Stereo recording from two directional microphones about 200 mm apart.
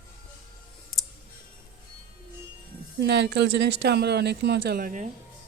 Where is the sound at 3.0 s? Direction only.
60° right (ahead or behind); by 5.1 s 40° right (ahead or behind).